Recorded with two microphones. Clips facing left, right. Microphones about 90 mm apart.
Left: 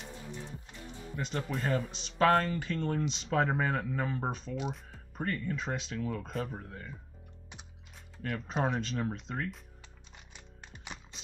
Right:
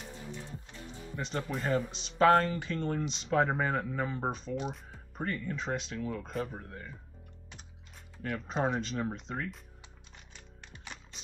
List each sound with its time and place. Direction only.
1.1 s speech: centre (ahead or behind)
2.2 s speech: 10° right (ahead or behind)
8.2 s speech: centre (ahead or behind)
10.3 s music: 15° left (ahead or behind)